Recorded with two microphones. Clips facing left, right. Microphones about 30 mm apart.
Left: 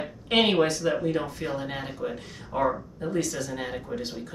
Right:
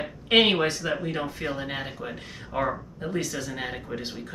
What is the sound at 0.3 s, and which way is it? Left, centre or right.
Speech, centre.